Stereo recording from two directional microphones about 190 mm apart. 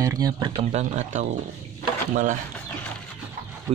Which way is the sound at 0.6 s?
35° right (ahead or behind).